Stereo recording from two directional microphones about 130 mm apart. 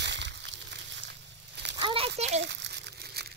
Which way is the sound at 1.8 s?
45° right (ahead or behind).